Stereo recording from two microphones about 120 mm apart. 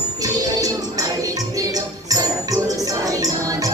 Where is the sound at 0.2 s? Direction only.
30° right (ahead or behind).